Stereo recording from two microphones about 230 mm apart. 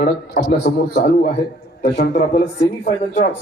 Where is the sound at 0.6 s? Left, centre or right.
Left.